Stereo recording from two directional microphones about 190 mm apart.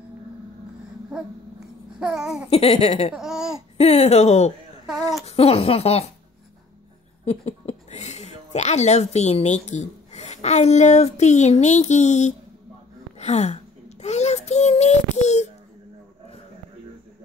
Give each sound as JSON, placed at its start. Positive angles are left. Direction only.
{"t": 2.0, "sound": "babbling", "side_deg": -5}
{"t": 2.5, "sound": "speech", "side_deg": 35}
{"t": 3.2, "sound": "laughter", "side_deg": -5}
{"t": 3.7, "sound": "speech", "side_deg": 35}
{"t": 4.8, "sound": "speech", "side_deg": 0}
{"t": 5.2, "sound": "speech", "side_deg": 30}
{"t": 7.2, "sound": "speech", "side_deg": 35}
{"t": 13.2, "sound": "child singing", "side_deg": 35}